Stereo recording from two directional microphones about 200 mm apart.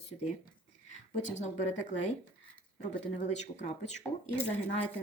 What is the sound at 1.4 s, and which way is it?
Speech, 35° left (ahead or behind).